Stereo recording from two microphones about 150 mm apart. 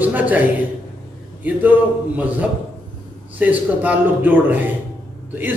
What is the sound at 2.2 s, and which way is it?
Speech, 10° right (ahead or behind).